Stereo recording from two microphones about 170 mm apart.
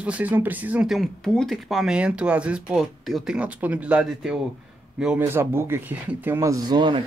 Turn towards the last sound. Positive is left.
turn(degrees=-25)  # may be behind; listen again after turning